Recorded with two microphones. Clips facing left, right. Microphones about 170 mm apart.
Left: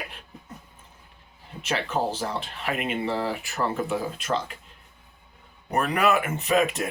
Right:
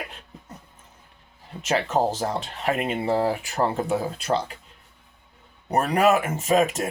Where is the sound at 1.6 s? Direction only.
45° right (ahead or behind).